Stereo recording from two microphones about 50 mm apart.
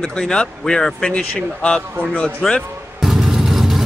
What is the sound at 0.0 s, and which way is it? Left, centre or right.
Speech, centre.